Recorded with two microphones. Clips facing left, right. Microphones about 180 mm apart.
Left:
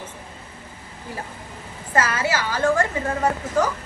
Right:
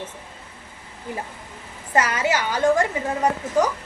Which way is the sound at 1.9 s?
20° right (ahead or behind).